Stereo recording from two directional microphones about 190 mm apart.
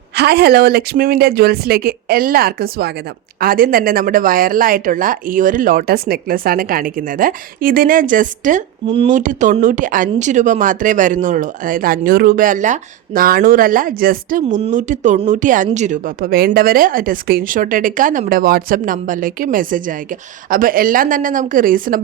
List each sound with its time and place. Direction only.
0.2 s speech: 55° right (ahead or behind)